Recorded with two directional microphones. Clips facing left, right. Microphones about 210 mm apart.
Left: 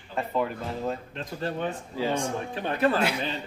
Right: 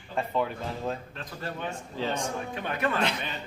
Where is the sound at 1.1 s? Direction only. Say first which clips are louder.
Left 5 dB; 25° left (ahead or behind).